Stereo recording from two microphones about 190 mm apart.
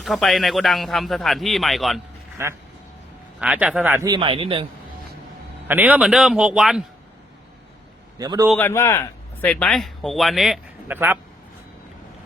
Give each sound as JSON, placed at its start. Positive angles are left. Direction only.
{"t": 0.0, "sound": "speech", "side_deg": 0}
{"t": 2.4, "sound": "a man's voice", "side_deg": -15}
{"t": 5.6, "sound": "speech", "side_deg": -10}
{"t": 8.2, "sound": "a man's voice", "side_deg": -20}
{"t": 8.5, "sound": "speech", "side_deg": 10}